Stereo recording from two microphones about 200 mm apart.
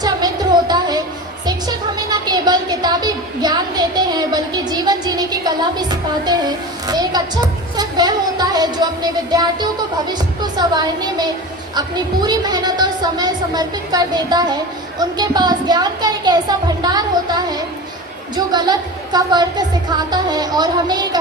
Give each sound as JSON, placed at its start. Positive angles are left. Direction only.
{"t": 0.0, "sound": "music", "side_deg": -20}
{"t": 1.5, "sound": "a sound", "side_deg": -20}
{"t": 7.8, "sound": "a woman's voice", "side_deg": -20}